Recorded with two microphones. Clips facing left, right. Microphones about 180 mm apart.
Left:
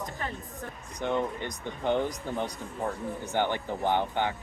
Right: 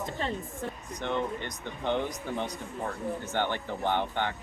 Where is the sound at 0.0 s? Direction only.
25° right (ahead or behind).